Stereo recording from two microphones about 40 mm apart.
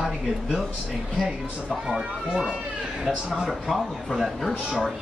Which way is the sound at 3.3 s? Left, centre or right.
Centre.